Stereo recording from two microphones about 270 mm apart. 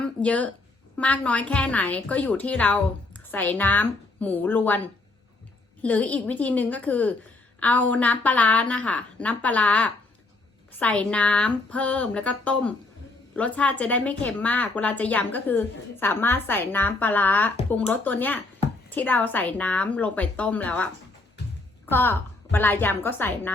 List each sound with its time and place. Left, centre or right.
0.0 s a sound: centre
0.9 s speech: centre
5.8 s speech: centre
21.4 s music: left
21.8 s a woman's voice: centre